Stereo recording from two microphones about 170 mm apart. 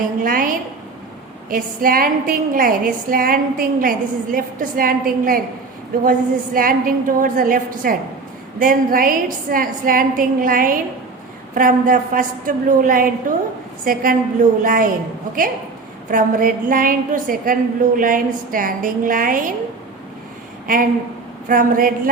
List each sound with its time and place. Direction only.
0.2 s a sound: 55° right (ahead or behind)
1.5 s a woman's voice: 55° right (ahead or behind)
16.0 s a woman's voice: 55° right (ahead or behind)
20.7 s a woman's voice: 55° right (ahead or behind)